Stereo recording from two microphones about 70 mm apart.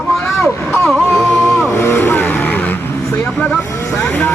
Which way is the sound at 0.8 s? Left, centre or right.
Centre.